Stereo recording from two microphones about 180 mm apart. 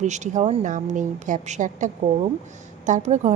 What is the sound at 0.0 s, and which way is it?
A woman's voice, 40° right (ahead or behind).